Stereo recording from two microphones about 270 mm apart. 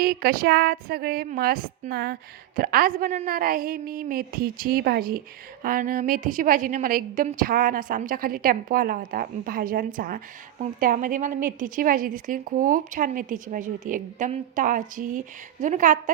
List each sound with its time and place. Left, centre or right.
0.0 s a woman's voice: right